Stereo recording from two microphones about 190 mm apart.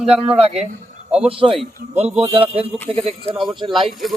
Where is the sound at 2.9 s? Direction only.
30° right (ahead or behind).